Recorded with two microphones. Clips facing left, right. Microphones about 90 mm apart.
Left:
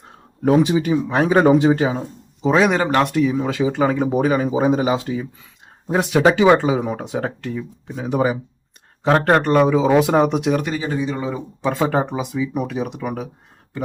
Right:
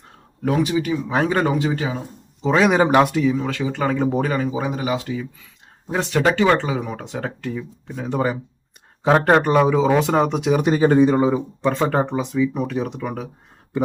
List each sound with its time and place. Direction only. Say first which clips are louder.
0.4 s speech: left 4 dB; 25° left (ahead or behind)
1.0 s speech: left 2 dB; centre (ahead or behind)
1.3 s speech: left 6 dB; 20° left (ahead or behind)
2.4 s speech: left 1 dB; centre (ahead or behind)
2.7 s speech: right 3 dB; 10° right (ahead or behind)
3.1 s speech: left 1 dB; centre (ahead or behind)
3.3 s speech: left 4 dB; 15° left (ahead or behind)
5.9 s speech: left 4 dB; 15° left (ahead or behind)
7.4 s speech: left 1 dB; centre (ahead or behind)
9.0 s speech: even; 10° right (ahead or behind)
10.8 s speech: right 8 dB; 50° right (ahead or behind)
11.6 s speech: left 1 dB; 5° left (ahead or behind)